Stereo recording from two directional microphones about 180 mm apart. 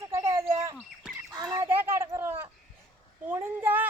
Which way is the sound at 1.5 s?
10° right (ahead or behind).